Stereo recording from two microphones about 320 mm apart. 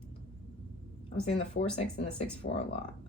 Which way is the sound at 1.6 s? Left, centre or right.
Left.